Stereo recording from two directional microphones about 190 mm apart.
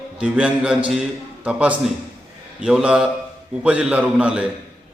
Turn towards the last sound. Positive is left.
turn(degrees=-5)  # may be behind; listen again after turning